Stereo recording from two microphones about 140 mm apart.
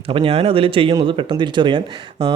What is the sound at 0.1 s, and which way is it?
Speech, 40° right (ahead or behind).